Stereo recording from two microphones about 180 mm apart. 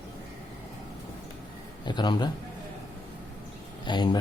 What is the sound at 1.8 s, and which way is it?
Speech, 25° left (ahead or behind).